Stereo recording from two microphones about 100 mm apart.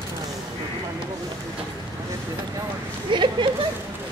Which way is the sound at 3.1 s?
55° right (ahead or behind).